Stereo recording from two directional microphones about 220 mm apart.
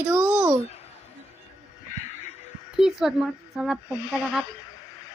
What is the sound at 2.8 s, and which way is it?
A woman's voice, centre (ahead or behind).